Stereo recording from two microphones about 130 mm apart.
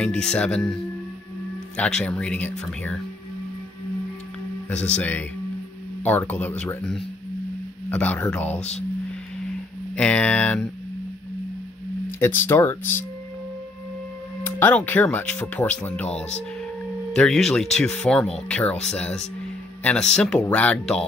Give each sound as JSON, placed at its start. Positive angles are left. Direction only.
{"t": 0.0, "sound": "speech", "side_deg": 5}
{"t": 1.8, "sound": "speech", "side_deg": 5}
{"t": 4.9, "sound": "speech", "side_deg": 10}
{"t": 8.5, "sound": "speech", "side_deg": 60}
{"t": 9.9, "sound": "speech", "side_deg": 10}
{"t": 12.2, "sound": "speech", "side_deg": 20}
{"t": 14.4, "sound": "speech", "side_deg": 15}